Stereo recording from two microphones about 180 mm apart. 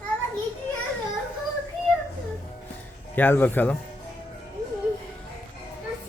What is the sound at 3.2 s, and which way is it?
Speech, 10° left (ahead or behind).